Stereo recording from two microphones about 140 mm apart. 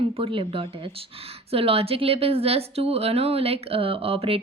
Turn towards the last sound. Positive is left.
turn(degrees=-45)  # may be behind; listen again after turning